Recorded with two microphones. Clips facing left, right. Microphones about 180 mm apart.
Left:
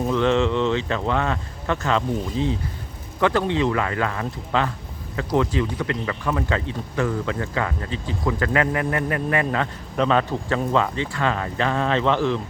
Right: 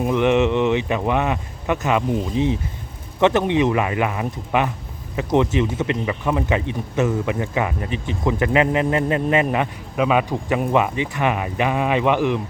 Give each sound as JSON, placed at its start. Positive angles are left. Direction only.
{"t": 0.0, "sound": "speech", "side_deg": -15}